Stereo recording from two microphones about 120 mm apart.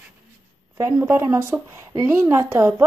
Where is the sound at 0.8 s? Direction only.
20° right (ahead or behind).